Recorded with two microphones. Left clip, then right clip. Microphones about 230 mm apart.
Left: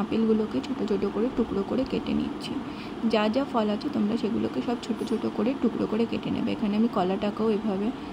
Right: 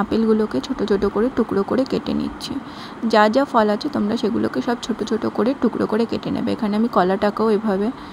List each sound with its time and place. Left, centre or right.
0.1 s speech: right